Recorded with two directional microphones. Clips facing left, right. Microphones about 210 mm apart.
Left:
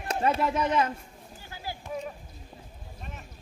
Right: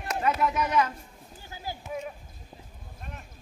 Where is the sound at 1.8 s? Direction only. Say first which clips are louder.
Left 1 dB; 5° right (ahead or behind).